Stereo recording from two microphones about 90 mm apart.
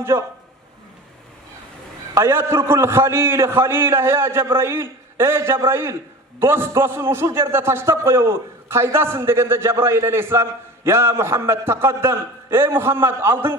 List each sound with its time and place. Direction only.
0.1 s speech: 35° right (ahead or behind)
2.1 s a man's voice: 30° right (ahead or behind)